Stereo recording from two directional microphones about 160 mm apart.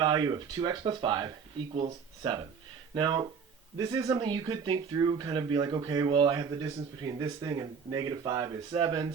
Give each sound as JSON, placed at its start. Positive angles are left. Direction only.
{"t": 0.0, "sound": "speech", "side_deg": -25}